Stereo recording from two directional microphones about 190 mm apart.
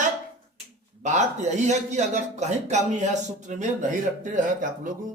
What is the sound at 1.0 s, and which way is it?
Speech, 40° right (ahead or behind).